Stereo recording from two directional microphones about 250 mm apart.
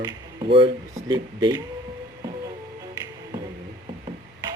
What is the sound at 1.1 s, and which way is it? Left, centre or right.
Speech, centre.